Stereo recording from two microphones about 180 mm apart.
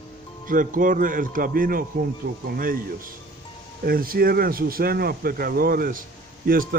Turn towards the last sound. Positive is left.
turn(degrees=-50)  # may be behind; listen again after turning